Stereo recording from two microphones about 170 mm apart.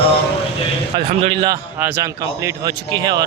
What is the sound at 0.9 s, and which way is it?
Speech, 30° right (ahead or behind).